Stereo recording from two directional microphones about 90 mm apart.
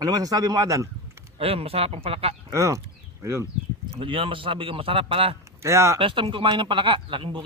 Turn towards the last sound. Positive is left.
turn(degrees=-65)  # may be behind; listen again after turning